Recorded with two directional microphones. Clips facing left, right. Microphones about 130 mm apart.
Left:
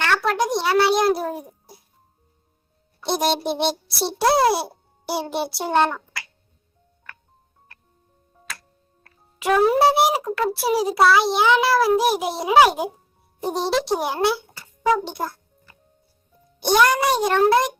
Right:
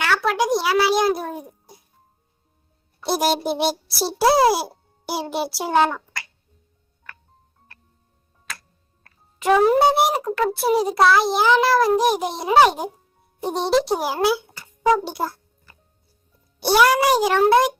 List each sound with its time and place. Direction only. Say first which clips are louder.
0.0 s a sound: even; 5° right (ahead or behind)
3.0 s a child's voice: right 1 dB; 5° right (ahead or behind)
9.4 s a child's voice: right 1 dB; centre (ahead or behind)
16.6 s a child's voice: right 1 dB; 5° right (ahead or behind)